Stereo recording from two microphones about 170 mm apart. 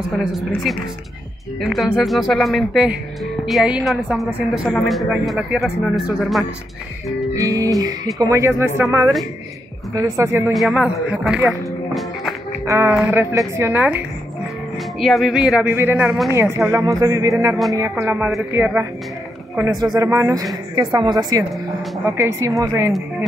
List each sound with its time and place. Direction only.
0.1 s speech: centre (ahead or behind)
7.3 s a woman's voice: 20° right (ahead or behind)
10.1 s speech: 15° right (ahead or behind)
10.5 s speech: centre (ahead or behind)
11.9 s music: centre (ahead or behind)
12.6 s music: 15° right (ahead or behind)
13.0 s speech: 15° right (ahead or behind)
15.0 s a woman's voice: centre (ahead or behind)